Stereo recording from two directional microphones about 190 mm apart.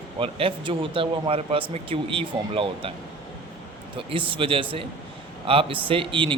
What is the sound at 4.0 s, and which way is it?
Speech, 30° right (ahead or behind).